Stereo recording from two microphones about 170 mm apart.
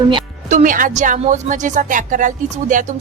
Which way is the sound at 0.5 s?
50° right (ahead or behind).